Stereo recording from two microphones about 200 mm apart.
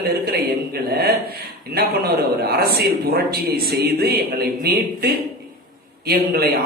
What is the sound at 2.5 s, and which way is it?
A man's voice, 50° right (ahead or behind).